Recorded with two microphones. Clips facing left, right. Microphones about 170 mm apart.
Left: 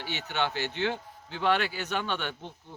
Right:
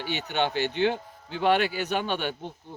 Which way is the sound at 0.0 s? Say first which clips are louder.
Right 4 dB; 15° right (ahead or behind).